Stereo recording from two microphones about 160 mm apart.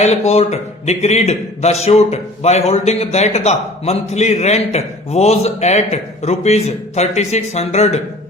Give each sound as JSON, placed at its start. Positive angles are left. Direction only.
{"t": 0.3, "sound": "a man's voice", "side_deg": 40}